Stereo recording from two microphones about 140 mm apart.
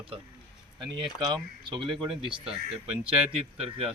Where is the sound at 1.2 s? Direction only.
35° right (ahead or behind).